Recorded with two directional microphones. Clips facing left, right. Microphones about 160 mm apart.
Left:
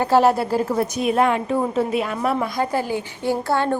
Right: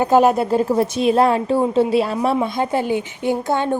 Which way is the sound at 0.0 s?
20° right (ahead or behind).